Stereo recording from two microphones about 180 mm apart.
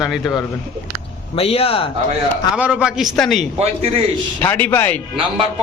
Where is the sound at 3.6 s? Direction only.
35° right (ahead or behind).